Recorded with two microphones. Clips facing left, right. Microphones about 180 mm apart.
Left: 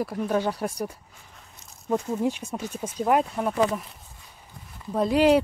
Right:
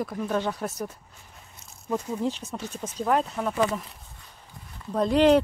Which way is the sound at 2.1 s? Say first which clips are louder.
Left 2 dB; 10° left (ahead or behind).